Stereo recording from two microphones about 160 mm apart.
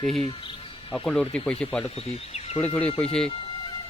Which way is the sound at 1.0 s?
5° left (ahead or behind).